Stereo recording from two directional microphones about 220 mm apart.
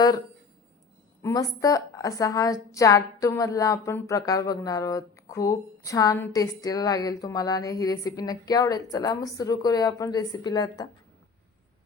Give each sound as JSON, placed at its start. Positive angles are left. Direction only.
{"t": 1.2, "sound": "a woman's voice", "side_deg": 15}